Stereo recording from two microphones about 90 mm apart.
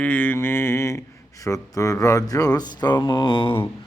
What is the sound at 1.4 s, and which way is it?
Speech, 40° left (ahead or behind).